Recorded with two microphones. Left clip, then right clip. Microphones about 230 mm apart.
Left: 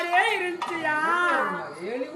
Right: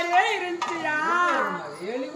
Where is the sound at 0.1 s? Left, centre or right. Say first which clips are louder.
Right 1 dB; left.